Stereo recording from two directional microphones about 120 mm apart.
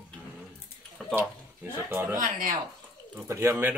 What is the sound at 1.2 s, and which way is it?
Speech, 15° right (ahead or behind).